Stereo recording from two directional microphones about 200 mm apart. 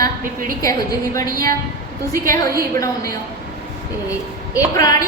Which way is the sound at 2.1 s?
45° right (ahead or behind).